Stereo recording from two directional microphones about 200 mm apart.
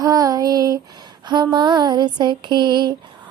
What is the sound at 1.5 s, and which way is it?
Female singing, 20° right (ahead or behind).